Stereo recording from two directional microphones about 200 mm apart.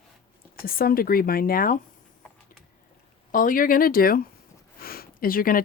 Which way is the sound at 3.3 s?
45° left (ahead or behind).